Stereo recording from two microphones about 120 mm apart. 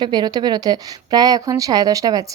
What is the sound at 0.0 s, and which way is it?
A woman's voice, 35° right (ahead or behind).